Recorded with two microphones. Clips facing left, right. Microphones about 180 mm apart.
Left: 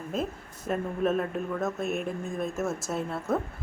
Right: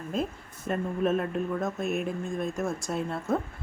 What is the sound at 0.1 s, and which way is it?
Speech, centre (ahead or behind).